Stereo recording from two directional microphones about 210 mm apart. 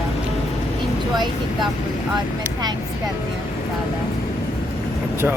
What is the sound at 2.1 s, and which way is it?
Speech, 20° right (ahead or behind).